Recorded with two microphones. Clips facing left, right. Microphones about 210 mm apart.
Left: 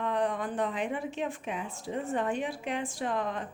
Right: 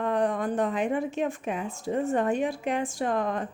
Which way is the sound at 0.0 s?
45° right (ahead or behind).